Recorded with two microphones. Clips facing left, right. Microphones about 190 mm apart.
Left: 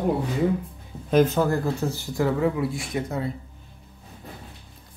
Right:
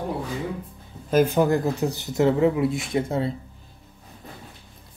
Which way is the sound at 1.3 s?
20° right (ahead or behind).